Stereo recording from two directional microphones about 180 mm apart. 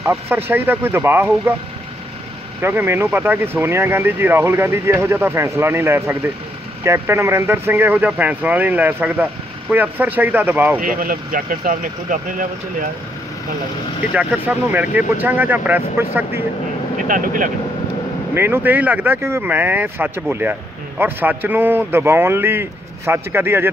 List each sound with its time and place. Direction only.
0.0 s speech: 10° right (ahead or behind)
2.6 s speech: 10° right (ahead or behind)
10.8 s speech: 50° right (ahead or behind)
14.1 s speech: 10° right (ahead or behind)
17.1 s speech: 50° right (ahead or behind)
18.3 s speech: 10° right (ahead or behind)